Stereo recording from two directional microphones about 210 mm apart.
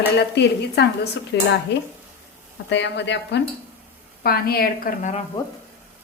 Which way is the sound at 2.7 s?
60° left (ahead or behind).